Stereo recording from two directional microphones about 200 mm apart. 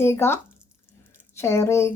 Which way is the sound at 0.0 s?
10° left (ahead or behind).